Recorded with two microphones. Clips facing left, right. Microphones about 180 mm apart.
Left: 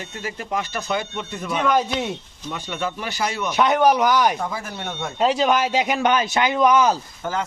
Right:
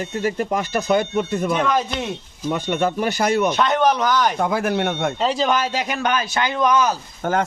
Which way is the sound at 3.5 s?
10° left (ahead or behind).